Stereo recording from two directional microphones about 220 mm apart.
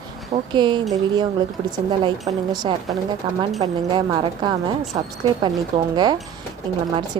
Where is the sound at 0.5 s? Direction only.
20° right (ahead or behind).